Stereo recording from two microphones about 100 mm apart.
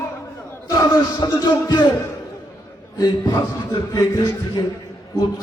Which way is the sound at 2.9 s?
40° left (ahead or behind).